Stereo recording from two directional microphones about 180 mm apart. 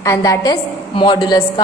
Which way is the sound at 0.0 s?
20° left (ahead or behind).